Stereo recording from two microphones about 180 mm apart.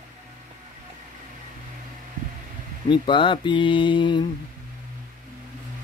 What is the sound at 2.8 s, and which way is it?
Speech, 25° left (ahead or behind).